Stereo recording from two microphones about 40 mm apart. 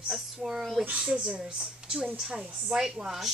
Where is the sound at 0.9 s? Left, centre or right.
Right.